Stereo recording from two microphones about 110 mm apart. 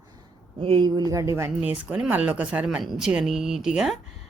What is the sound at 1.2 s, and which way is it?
Speech, 25° right (ahead or behind).